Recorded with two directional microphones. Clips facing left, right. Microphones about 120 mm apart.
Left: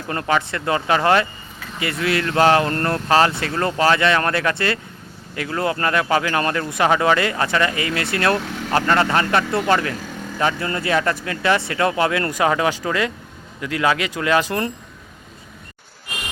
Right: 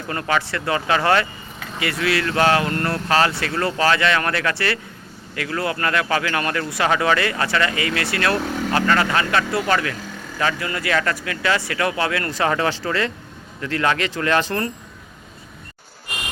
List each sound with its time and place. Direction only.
0.1 s speech: 25° left (ahead or behind)